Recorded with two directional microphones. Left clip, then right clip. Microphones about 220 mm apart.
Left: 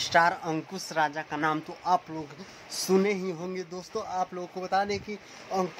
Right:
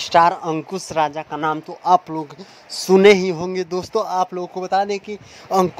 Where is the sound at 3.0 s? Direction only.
45° right (ahead or behind).